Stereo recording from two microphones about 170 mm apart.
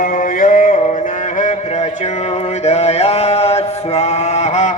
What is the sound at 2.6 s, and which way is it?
Mantra, 40° left (ahead or behind).